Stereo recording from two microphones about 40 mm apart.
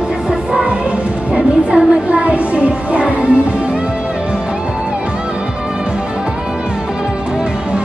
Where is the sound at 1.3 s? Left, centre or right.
Right.